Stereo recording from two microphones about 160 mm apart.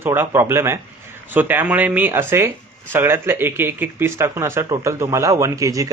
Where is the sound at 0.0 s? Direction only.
15° right (ahead or behind).